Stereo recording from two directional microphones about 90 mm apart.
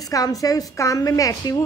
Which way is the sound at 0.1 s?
40° left (ahead or behind).